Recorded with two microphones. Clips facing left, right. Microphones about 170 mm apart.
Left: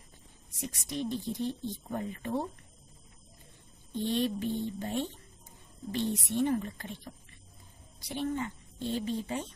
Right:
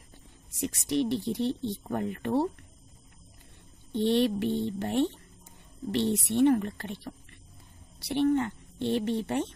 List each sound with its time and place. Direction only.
0.5 s speech: 70° right (ahead or behind)
3.9 s speech: 70° right (ahead or behind)